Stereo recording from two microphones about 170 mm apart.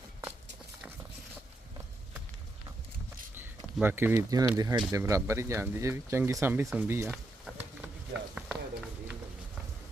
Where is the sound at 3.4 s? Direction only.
10° right (ahead or behind).